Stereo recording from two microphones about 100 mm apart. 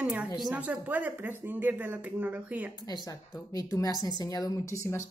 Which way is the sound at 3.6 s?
35° left (ahead or behind).